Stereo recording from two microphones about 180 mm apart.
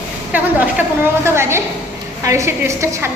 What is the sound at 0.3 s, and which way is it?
A woman's voice, 10° right (ahead or behind).